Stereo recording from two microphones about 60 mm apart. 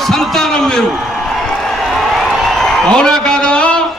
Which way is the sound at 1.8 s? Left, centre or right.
Centre.